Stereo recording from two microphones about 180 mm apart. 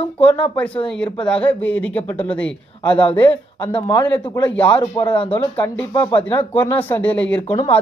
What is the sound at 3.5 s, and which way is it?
A man's voice, 25° left (ahead or behind).